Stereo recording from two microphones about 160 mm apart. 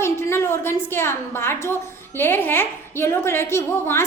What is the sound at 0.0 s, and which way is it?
A woman's voice, 15° left (ahead or behind).